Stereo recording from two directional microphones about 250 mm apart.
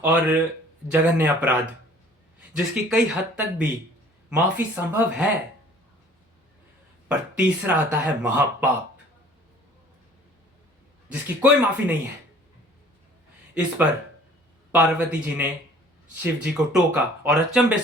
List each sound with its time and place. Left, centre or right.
0.0 s speech: centre
2.9 s speech: centre
7.1 s speech: centre
11.1 s speech: centre
13.5 s speech: centre